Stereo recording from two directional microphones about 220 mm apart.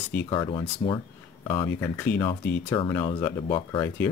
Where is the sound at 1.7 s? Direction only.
10° left (ahead or behind).